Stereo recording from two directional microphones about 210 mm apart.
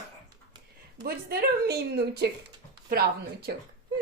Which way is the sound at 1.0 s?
45° right (ahead or behind).